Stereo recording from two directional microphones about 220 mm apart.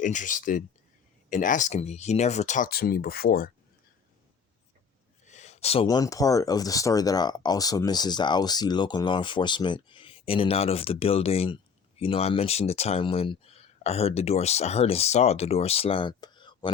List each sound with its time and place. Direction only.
0.0 s speech: 35° left (ahead or behind)
5.2 s speech: 35° left (ahead or behind)